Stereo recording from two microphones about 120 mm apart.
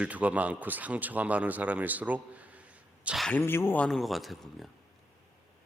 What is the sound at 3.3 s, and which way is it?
Speech, 20° left (ahead or behind).